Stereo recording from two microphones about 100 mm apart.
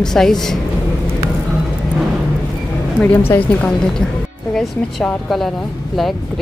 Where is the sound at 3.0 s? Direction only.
15° left (ahead or behind).